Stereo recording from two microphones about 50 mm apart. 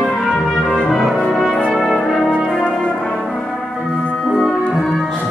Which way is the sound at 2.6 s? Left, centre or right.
Centre.